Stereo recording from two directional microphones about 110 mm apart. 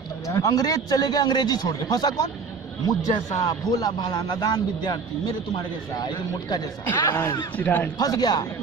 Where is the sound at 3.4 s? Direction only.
40° left (ahead or behind).